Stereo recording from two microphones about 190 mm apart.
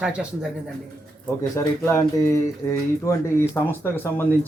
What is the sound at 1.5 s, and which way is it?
Speech, 15° left (ahead or behind).